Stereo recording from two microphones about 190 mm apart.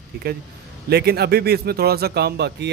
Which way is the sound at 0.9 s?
60° right (ahead or behind).